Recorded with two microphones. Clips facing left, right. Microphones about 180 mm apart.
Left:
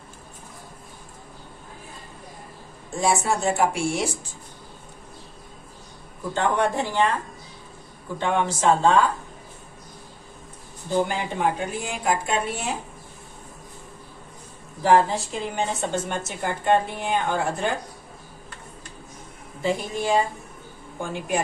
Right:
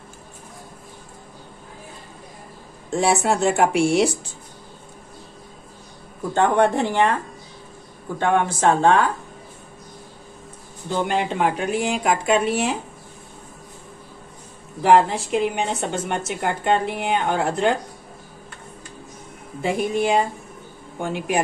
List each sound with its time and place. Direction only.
2.9 s a woman's voice: 70° right (ahead or behind)
6.3 s speech: 55° right (ahead or behind)
8.2 s speech: 55° right (ahead or behind)
10.9 s a woman's voice: 70° right (ahead or behind)
14.8 s a woman's voice: 65° right (ahead or behind)
19.6 s speech: 60° right (ahead or behind)